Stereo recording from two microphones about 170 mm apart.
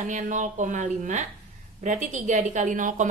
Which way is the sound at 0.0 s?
45° right (ahead or behind).